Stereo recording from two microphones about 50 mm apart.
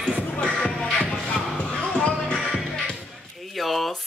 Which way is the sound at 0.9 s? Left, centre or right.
Left.